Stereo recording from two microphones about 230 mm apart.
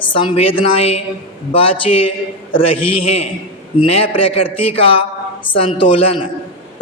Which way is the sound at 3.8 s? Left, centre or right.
Left.